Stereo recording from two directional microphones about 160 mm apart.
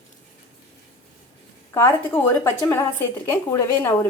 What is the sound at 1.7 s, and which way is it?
A woman's voice, 15° left (ahead or behind).